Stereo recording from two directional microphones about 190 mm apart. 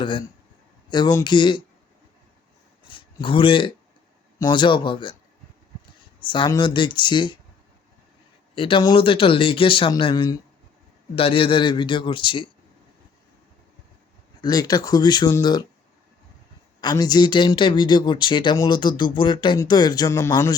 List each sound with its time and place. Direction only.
0.0 s speech: 25° left (ahead or behind)
2.9 s a sound: 25° left (ahead or behind)
4.4 s speech: 20° left (ahead or behind)
6.2 s speech: 25° left (ahead or behind)
8.5 s speech: 25° left (ahead or behind)
14.4 s speech: 20° left (ahead or behind)
16.8 s speech: 20° left (ahead or behind)